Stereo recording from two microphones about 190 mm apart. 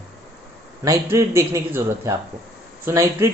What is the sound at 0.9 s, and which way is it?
A man's voice, 15° right (ahead or behind).